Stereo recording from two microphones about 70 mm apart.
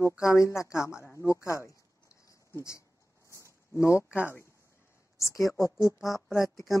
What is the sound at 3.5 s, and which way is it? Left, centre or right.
Speech, left.